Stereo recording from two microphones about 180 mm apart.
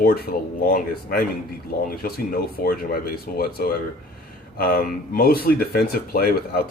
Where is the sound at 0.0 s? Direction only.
60° left (ahead or behind).